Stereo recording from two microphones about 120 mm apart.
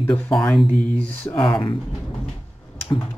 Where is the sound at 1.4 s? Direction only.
45° left (ahead or behind).